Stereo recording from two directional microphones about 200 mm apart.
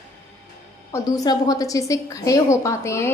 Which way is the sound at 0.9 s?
15° left (ahead or behind).